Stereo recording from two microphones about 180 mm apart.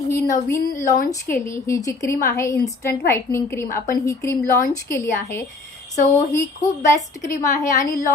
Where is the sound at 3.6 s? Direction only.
50° left (ahead or behind).